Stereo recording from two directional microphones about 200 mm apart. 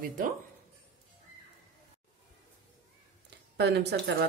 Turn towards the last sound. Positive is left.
turn(degrees=-55)  # may be behind; listen again after turning